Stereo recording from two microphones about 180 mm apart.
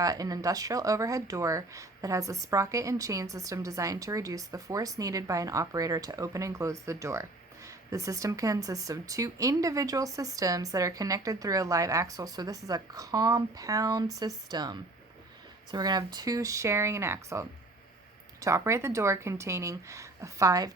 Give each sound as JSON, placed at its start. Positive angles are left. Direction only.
{"t": 0.0, "sound": "speech", "side_deg": -20}